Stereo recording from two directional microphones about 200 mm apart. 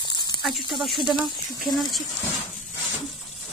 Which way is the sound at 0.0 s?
20° left (ahead or behind).